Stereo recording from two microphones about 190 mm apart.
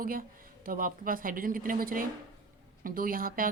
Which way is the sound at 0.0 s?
50° right (ahead or behind).